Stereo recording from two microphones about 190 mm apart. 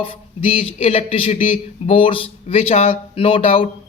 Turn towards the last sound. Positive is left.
turn(degrees=30)  # may be behind; listen again after turning